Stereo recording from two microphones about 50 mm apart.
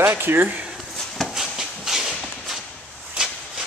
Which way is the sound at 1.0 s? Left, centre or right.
Centre.